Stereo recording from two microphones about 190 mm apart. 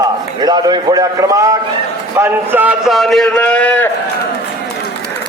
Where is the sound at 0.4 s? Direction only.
20° right (ahead or behind); by 3.8 s 10° left (ahead or behind).